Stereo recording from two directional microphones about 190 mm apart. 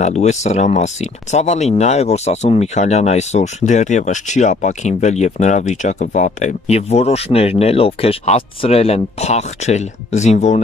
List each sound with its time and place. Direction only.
0.0 s speech: 35° left (ahead or behind)